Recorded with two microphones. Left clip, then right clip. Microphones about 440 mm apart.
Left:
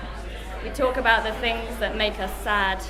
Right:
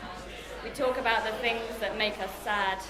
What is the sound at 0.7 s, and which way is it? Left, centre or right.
A woman's voice, left.